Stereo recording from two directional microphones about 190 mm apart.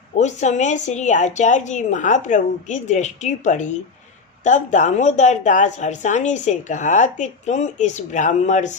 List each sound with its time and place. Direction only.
0.2 s a woman's voice: 40° left (ahead or behind)